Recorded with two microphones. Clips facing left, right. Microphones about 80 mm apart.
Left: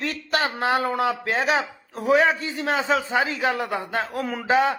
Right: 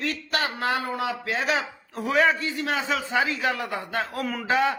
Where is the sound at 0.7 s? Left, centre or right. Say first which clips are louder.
Left 5 dB; left.